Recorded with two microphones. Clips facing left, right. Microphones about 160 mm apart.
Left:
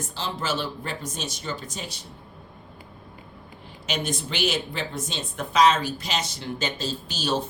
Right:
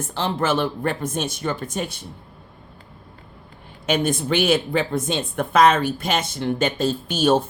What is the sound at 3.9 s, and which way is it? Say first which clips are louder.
Speech: right 9 dB; 55° right (ahead or behind).